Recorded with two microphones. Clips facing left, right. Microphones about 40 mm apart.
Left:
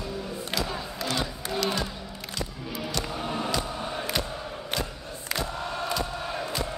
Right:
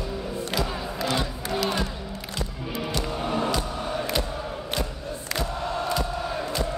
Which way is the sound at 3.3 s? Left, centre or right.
Right.